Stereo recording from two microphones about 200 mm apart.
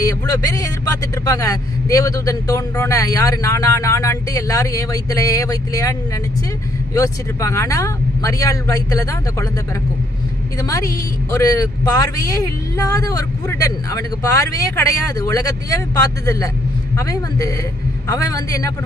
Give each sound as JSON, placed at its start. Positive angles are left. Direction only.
{"t": 0.0, "sound": "speech", "side_deg": 15}
{"t": 10.6, "sound": "speech", "side_deg": 15}